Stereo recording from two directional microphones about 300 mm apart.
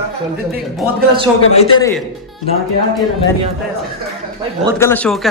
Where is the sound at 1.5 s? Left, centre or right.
Left.